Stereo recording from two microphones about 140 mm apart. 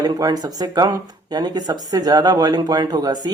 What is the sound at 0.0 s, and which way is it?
Speech, 25° right (ahead or behind).